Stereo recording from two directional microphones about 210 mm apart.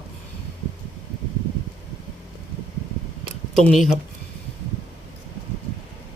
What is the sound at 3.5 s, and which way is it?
Speech, centre (ahead or behind).